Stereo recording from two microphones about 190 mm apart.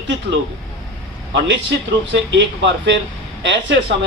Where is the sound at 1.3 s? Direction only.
70° right (ahead or behind).